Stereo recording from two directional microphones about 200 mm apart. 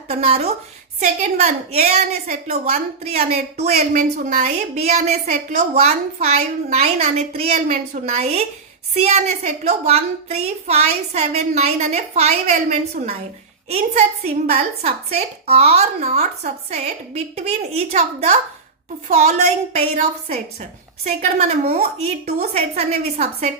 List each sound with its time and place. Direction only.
0.1 s a woman's voice: 30° right (ahead or behind)